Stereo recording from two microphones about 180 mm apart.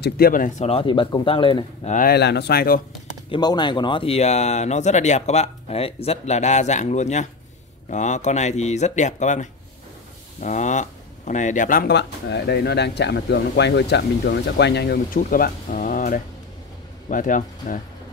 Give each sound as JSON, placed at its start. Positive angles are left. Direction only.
{"t": 0.0, "sound": "speech", "side_deg": 55}
{"t": 0.7, "sound": "speech", "side_deg": 30}
{"t": 1.9, "sound": "speech", "side_deg": 55}
{"t": 3.3, "sound": "speech", "side_deg": 25}
{"t": 11.9, "sound": "speech", "side_deg": 70}